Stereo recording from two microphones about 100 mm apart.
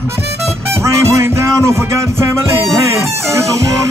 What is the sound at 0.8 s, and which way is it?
Music, 30° right (ahead or behind).